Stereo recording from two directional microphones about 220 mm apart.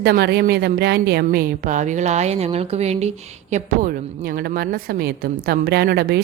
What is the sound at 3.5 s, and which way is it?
A woman's voice, 40° right (ahead or behind).